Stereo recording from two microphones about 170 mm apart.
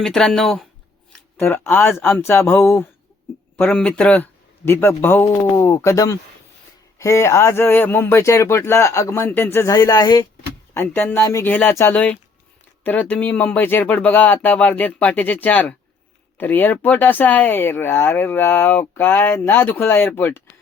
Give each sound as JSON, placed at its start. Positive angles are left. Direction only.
{"t": 0.0, "sound": "speech", "side_deg": 5}
{"t": 10.8, "sound": "speech", "side_deg": 10}